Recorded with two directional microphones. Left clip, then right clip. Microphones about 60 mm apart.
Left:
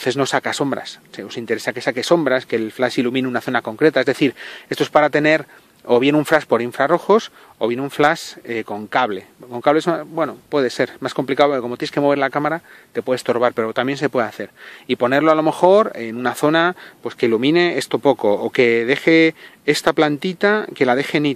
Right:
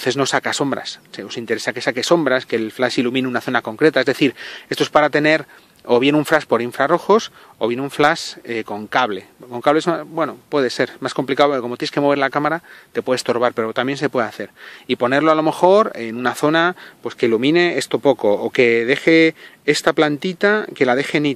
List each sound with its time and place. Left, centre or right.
0.0 s speech: right
12.9 s speech: right
13.3 s speech: centre
16.4 s speech: centre